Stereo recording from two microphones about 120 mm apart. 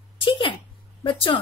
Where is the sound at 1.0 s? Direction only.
45° left (ahead or behind).